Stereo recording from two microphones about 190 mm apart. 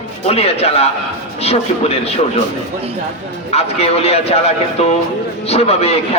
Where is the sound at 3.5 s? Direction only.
35° left (ahead or behind).